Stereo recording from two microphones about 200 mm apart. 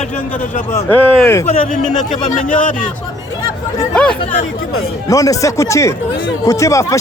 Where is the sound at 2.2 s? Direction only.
40° left (ahead or behind).